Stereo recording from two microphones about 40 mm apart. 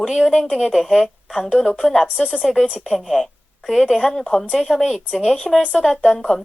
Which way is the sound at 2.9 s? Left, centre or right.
Centre.